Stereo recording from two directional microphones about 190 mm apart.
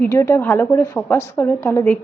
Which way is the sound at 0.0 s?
15° left (ahead or behind).